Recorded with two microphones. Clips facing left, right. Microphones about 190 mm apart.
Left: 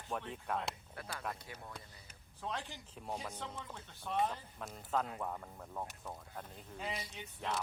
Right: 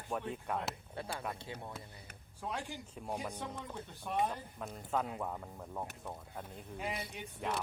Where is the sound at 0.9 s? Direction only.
30° right (ahead or behind).